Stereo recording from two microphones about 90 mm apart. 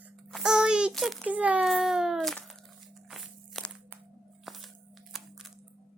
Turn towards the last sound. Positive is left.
turn(degrees=0)  # may be behind; listen again after turning